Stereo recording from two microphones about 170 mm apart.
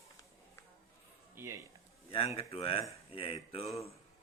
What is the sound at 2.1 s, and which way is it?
A man's voice, 30° left (ahead or behind).